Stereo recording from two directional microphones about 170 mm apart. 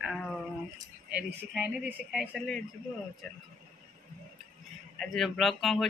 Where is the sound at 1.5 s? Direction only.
5° right (ahead or behind).